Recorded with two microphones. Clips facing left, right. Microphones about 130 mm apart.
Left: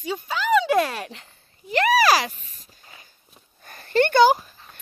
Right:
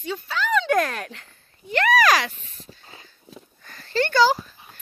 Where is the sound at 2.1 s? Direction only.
35° left (ahead or behind).